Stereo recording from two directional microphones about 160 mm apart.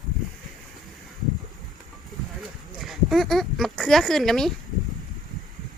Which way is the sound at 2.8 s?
Centre (ahead or behind).